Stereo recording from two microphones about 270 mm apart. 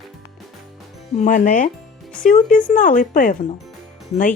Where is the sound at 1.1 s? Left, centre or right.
Left.